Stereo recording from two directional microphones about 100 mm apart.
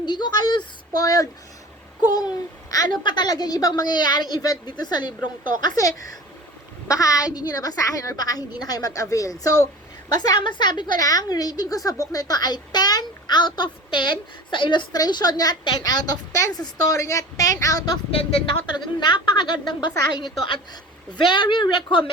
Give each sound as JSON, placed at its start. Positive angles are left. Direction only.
{"t": 0.0, "sound": "a sound", "side_deg": 45}
{"t": 2.1, "sound": "speech", "side_deg": 40}
{"t": 3.0, "sound": "a woman's voice", "side_deg": 50}
{"t": 14.9, "sound": "a woman's voice", "side_deg": 40}
{"t": 18.1, "sound": "speech", "side_deg": 75}
{"t": 18.9, "sound": "a woman's voice", "side_deg": 50}
{"t": 21.1, "sound": "a woman's voice", "side_deg": 50}